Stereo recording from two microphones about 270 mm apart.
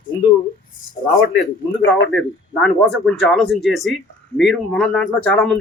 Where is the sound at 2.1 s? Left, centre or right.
Centre.